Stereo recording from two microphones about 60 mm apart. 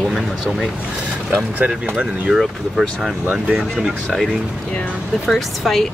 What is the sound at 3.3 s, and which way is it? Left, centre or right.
Speech, centre.